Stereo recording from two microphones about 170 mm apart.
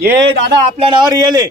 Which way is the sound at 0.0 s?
80° right.